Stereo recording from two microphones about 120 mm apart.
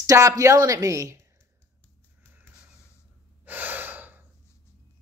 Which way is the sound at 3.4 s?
15° right (ahead or behind).